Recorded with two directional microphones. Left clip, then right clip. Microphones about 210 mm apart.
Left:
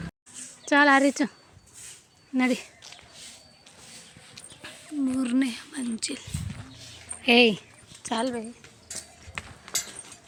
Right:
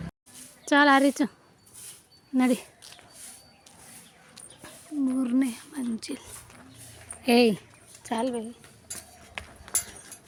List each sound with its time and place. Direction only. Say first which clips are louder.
0.7 s speech: left 1 dB; 10° right (ahead or behind)
2.3 s speech: even; 20° right (ahead or behind)
4.4 s a sound: left 4 dB; 5° left (ahead or behind)
5.2 s a woman's voice: even; 5° right (ahead or behind)